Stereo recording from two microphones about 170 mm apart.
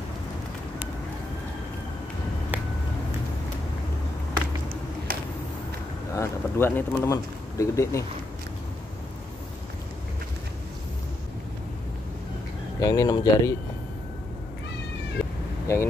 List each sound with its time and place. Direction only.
4.4 s a sound: 55° right (ahead or behind)
6.1 s speech: 15° left (ahead or behind)
12.8 s speech: 20° left (ahead or behind)
15.6 s speech: 15° left (ahead or behind)